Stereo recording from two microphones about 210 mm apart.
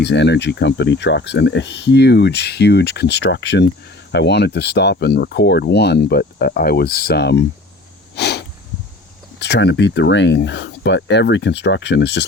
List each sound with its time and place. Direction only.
0.0 s speech: 55° left (ahead or behind)
8.1 s a sound: 55° left (ahead or behind)
9.4 s speech: 55° left (ahead or behind)